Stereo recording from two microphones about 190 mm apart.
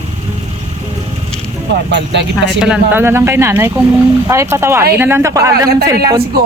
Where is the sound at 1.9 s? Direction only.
65° right (ahead or behind).